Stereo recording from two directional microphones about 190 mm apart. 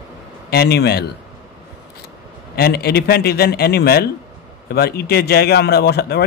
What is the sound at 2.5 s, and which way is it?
A man's voice, 55° left (ahead or behind).